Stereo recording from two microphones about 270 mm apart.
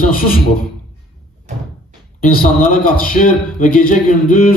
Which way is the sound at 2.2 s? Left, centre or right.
Left.